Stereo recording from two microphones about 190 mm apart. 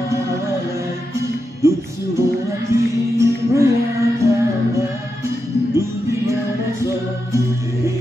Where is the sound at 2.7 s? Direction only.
15° right (ahead or behind).